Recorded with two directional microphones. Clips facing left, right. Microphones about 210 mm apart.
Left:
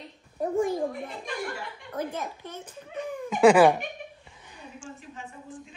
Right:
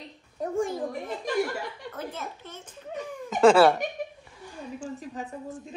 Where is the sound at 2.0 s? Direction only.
15° left (ahead or behind).